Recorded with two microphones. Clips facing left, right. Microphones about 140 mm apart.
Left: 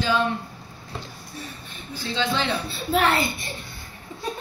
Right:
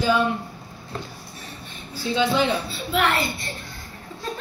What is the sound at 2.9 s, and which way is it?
Speech, 35° left (ahead or behind).